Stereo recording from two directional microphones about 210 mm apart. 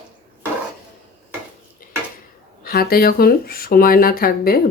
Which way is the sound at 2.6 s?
45° left (ahead or behind).